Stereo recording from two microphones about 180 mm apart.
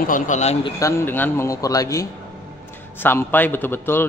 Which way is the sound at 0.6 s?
15° left (ahead or behind).